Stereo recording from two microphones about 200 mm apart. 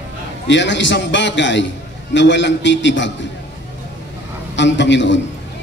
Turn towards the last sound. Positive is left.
turn(degrees=65)  # may be behind; listen again after turning